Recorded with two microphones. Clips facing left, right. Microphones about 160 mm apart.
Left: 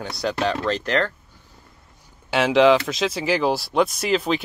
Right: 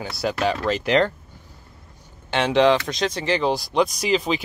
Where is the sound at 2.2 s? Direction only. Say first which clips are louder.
Left 2 dB; 5° left (ahead or behind).